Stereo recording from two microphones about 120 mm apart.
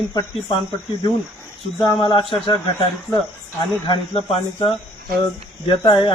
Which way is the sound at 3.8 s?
45° left (ahead or behind).